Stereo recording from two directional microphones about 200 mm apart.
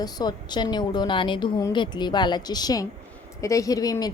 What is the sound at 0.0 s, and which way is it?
A woman's voice, 20° left (ahead or behind).